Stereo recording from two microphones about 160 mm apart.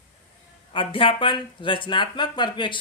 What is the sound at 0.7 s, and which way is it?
Speech, 30° left (ahead or behind).